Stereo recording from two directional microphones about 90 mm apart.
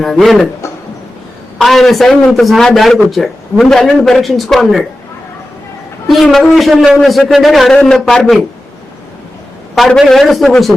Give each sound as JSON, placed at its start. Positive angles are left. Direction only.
{"t": 0.0, "sound": "speech", "side_deg": 0}
{"t": 0.6, "sound": "a sound", "side_deg": 35}
{"t": 1.5, "sound": "speech", "side_deg": 0}
{"t": 6.1, "sound": "speech", "side_deg": 0}
{"t": 7.7, "sound": "speech", "side_deg": 10}
{"t": 9.7, "sound": "speech", "side_deg": 0}